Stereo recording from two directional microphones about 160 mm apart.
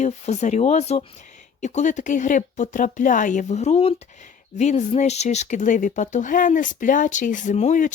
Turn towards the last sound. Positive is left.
turn(degrees=50)  # may be behind; listen again after turning